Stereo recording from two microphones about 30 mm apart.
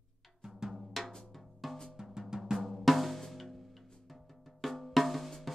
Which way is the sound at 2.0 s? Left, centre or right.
Right.